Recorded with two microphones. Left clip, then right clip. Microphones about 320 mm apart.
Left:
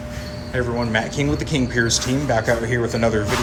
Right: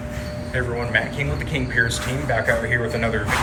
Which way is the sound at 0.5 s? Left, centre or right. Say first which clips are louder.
Left 1 dB; centre.